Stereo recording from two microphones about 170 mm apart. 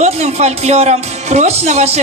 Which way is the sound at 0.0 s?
40° right (ahead or behind).